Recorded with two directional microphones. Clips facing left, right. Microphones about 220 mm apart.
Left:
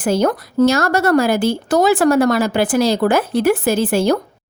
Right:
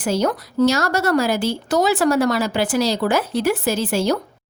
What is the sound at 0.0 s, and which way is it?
Speech, 55° left (ahead or behind).